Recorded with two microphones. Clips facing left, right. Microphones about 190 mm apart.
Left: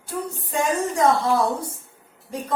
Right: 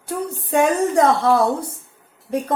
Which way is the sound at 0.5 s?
60° right (ahead or behind).